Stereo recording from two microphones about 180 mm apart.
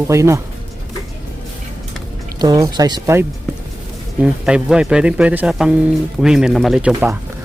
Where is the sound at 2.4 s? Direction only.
20° right (ahead or behind).